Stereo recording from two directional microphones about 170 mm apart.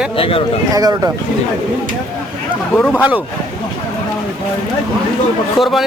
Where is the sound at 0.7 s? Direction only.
20° right (ahead or behind).